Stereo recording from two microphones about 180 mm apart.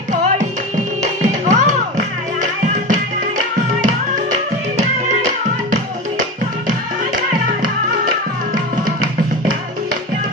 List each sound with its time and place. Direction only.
1.0 s music: 40° right (ahead or behind)